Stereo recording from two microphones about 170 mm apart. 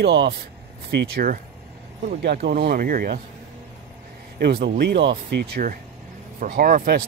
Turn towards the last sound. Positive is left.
turn(degrees=-55)  # may be behind; listen again after turning